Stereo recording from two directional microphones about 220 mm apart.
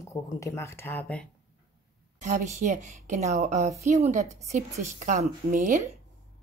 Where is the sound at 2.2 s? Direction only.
35° right (ahead or behind).